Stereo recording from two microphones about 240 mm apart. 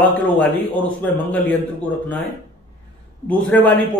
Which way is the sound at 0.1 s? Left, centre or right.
Centre.